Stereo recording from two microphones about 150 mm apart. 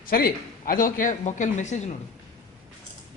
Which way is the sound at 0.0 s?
75° left (ahead or behind).